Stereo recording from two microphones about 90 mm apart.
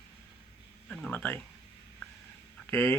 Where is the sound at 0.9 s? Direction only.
15° left (ahead or behind).